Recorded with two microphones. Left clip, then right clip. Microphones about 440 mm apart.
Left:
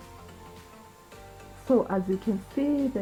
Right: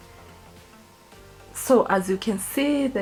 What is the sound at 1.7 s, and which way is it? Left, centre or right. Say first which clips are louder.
A woman's voice: right 6 dB; right.